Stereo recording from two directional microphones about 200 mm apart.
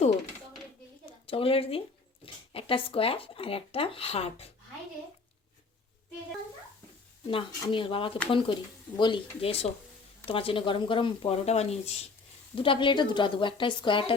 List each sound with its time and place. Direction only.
1.3 s speech: 30° left (ahead or behind)
7.3 s speech: 25° left (ahead or behind)